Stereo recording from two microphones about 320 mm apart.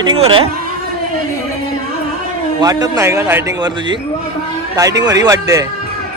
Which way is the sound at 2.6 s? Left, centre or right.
Centre.